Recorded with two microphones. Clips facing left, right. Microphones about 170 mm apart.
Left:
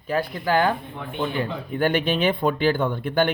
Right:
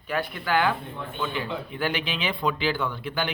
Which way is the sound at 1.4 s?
50° left (ahead or behind).